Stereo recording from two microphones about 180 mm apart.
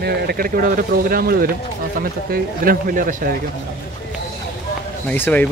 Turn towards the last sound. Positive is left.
turn(degrees=10)  # may be behind; listen again after turning